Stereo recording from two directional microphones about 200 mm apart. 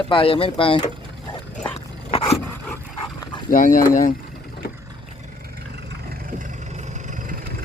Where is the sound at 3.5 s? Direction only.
45° left (ahead or behind).